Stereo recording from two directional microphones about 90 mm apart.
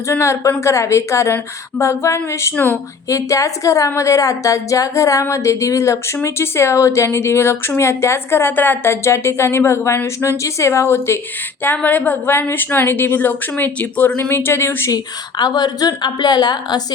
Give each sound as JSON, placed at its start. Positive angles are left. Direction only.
{"t": 0.1, "sound": "a woman's voice", "side_deg": 35}
{"t": 14.8, "sound": "a woman's voice", "side_deg": 45}